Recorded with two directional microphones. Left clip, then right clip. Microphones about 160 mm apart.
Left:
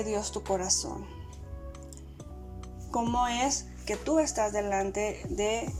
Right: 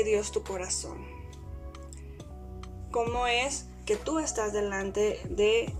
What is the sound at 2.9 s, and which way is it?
A woman's voice, 40° left (ahead or behind).